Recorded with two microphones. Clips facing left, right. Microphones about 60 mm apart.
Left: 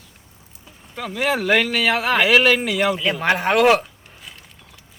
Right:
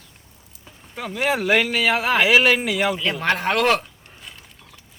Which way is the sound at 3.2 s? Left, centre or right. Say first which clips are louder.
Left 4 dB; centre.